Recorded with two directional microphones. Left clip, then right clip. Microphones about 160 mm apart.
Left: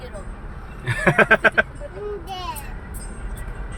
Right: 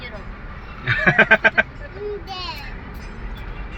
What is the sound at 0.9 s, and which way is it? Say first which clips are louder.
Speech: right 2 dB; 20° left (ahead or behind).